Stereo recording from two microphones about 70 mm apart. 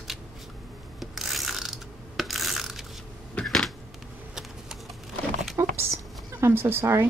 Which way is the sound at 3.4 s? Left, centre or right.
Centre.